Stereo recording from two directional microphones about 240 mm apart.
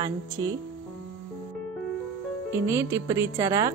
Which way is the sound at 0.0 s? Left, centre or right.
Centre.